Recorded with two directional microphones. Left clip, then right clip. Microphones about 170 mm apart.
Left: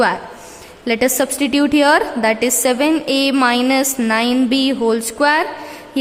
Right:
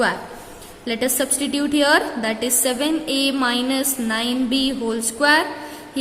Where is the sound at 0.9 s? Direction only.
35° left (ahead or behind).